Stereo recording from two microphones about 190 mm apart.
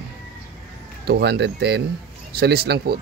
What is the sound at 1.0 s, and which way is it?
Speech, 60° right (ahead or behind).